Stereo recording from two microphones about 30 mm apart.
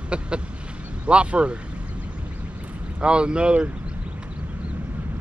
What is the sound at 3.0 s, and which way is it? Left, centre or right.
Speech, right.